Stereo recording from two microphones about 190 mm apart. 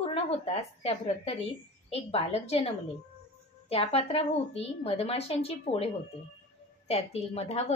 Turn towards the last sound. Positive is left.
turn(degrees=35)  # may be behind; listen again after turning